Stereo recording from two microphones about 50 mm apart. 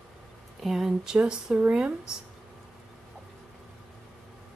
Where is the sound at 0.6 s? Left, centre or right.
Centre.